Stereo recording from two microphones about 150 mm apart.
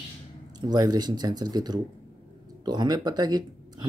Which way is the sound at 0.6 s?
25° right (ahead or behind).